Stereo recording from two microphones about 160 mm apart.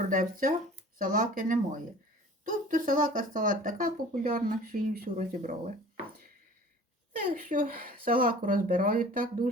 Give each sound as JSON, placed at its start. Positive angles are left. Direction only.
{"t": 0.0, "sound": "speech", "side_deg": -55}
{"t": 7.3, "sound": "speech", "side_deg": -60}